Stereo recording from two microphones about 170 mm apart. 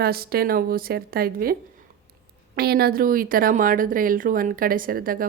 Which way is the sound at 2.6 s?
65° right (ahead or behind).